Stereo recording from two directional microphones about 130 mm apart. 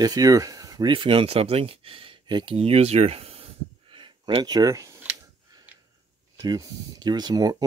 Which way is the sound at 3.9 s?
40° right (ahead or behind).